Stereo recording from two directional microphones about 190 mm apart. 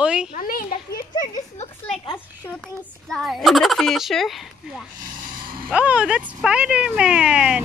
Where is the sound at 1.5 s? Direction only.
35° left (ahead or behind).